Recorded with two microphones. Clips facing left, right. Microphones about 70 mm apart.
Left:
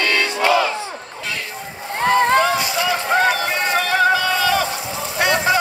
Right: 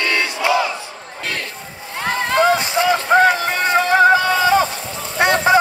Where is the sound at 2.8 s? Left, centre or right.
Right.